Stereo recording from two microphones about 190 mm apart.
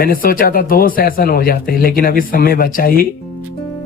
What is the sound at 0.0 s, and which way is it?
Speech, 50° left (ahead or behind).